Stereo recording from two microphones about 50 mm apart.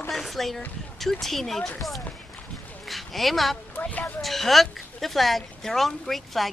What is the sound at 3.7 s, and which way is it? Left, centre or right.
Speech, left.